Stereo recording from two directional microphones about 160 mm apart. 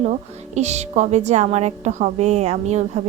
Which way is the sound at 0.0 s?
45° right (ahead or behind).